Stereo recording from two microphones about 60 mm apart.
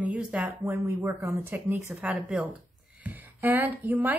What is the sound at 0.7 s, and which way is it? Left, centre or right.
Speech, right.